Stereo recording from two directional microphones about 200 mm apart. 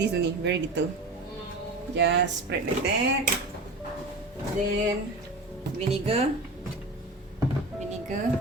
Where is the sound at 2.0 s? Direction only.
60° right (ahead or behind).